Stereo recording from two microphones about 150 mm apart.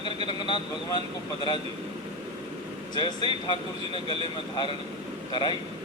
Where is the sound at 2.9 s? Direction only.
30° left (ahead or behind).